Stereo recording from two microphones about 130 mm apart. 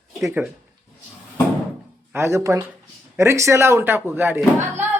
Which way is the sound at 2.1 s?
20° right (ahead or behind).